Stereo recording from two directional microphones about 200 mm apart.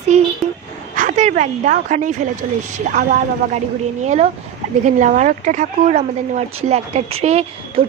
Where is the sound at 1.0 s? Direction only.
35° right (ahead or behind).